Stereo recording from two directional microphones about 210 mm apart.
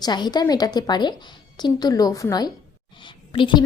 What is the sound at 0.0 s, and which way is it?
Speech, 20° left (ahead or behind).